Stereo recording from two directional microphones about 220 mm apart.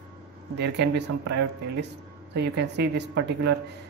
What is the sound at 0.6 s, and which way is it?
Speech, 50° right (ahead or behind).